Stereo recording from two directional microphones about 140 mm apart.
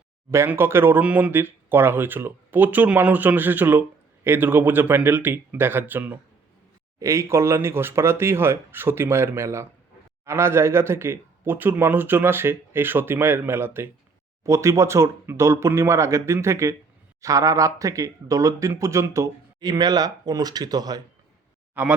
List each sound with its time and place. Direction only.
0.3 s speech: 15° right (ahead or behind)
21.8 s speech: 10° right (ahead or behind)